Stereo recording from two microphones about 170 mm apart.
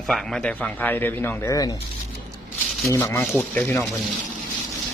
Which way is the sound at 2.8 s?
15° left (ahead or behind).